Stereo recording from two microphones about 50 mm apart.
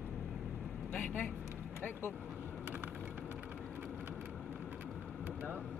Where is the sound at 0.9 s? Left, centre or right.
Left.